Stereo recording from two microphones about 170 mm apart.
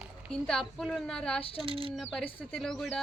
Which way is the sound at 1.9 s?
5° left (ahead or behind).